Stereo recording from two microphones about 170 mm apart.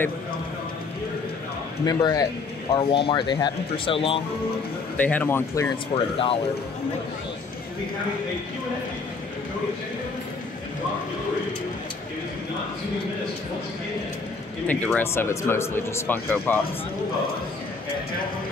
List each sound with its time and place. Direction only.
1.9 s speech: 25° left (ahead or behind)
4.9 s speech: 10° left (ahead or behind)
5.9 s speech: 35° left (ahead or behind)
14.7 s speech: 10° left (ahead or behind)